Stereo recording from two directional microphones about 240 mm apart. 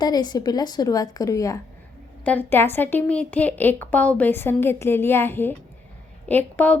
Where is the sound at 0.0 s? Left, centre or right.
Centre.